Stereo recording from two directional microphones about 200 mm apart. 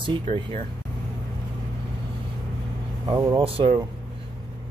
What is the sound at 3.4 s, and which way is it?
Speech, 30° right (ahead or behind).